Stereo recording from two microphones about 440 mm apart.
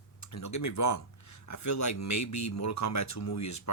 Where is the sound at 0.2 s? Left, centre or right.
Left.